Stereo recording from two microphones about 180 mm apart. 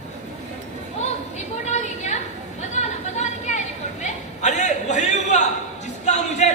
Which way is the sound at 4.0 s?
40° left (ahead or behind).